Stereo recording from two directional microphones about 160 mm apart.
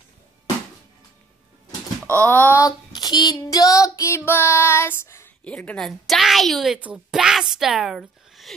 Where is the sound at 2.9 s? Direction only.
25° left (ahead or behind).